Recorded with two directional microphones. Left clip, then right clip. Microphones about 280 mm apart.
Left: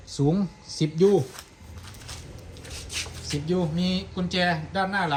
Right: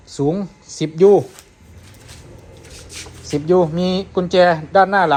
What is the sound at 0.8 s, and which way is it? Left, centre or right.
Speech, centre.